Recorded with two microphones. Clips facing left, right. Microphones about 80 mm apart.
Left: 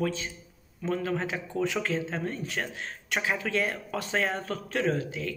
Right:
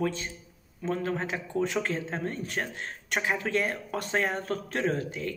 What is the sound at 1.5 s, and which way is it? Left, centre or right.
Speech, right.